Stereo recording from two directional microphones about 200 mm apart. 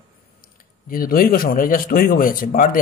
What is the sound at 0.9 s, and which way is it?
Speech, 45° left (ahead or behind).